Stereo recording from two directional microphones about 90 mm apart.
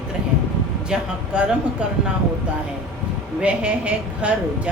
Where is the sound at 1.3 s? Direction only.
10° right (ahead or behind).